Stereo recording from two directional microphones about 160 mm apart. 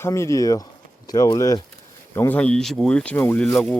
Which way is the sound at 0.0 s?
20° left (ahead or behind).